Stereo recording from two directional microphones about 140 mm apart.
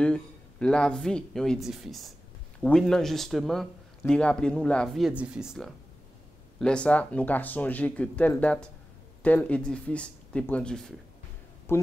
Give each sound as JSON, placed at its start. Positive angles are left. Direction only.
{"t": 0.0, "sound": "speech", "side_deg": 5}
{"t": 11.7, "sound": "speech", "side_deg": 15}